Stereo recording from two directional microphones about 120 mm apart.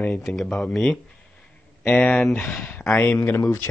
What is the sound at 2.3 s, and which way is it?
Speech, 15° left (ahead or behind).